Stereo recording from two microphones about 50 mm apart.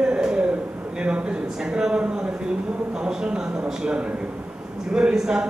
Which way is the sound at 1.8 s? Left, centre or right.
Centre.